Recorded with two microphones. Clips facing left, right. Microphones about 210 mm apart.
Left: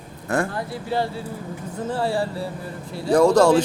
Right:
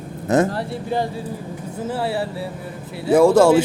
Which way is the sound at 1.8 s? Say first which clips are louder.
Even; 5° right (ahead or behind).